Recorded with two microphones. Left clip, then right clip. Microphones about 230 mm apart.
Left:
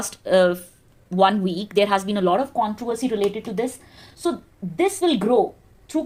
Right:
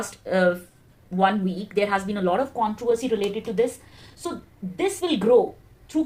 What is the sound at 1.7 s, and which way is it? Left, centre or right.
Speech, left.